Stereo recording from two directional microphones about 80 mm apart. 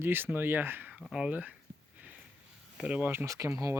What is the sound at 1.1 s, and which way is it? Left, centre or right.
Speech, centre.